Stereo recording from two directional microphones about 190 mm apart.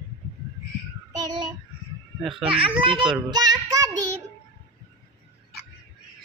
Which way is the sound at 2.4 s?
25° right (ahead or behind).